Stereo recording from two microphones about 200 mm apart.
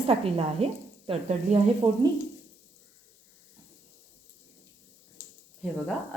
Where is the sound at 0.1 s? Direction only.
30° right (ahead or behind).